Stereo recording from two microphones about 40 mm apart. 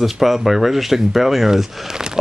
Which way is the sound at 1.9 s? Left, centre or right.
Centre.